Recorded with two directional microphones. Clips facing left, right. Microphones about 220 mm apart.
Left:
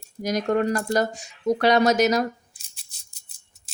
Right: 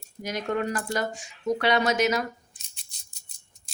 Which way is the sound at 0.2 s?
40° left (ahead or behind).